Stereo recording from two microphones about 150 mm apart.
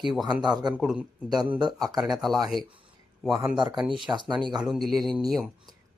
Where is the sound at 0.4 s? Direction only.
30° right (ahead or behind).